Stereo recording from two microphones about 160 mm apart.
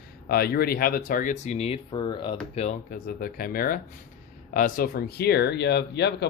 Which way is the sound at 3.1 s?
65° left (ahead or behind).